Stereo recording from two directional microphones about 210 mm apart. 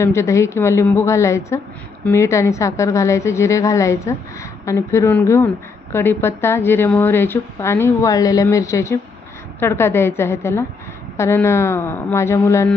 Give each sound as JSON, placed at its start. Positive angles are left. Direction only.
{"t": 0.0, "sound": "a woman's voice", "side_deg": 15}